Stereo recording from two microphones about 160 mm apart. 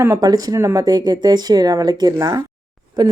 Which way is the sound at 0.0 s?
20° right (ahead or behind).